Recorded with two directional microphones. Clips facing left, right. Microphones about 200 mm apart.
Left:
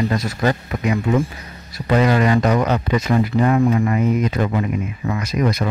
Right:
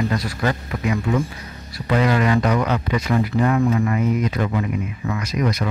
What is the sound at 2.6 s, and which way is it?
Speech, 40° left (ahead or behind).